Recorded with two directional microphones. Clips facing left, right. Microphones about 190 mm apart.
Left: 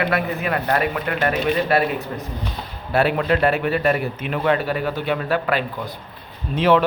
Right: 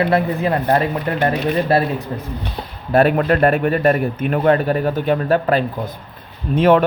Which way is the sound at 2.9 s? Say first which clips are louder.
Right 4 dB; 50° right (ahead or behind).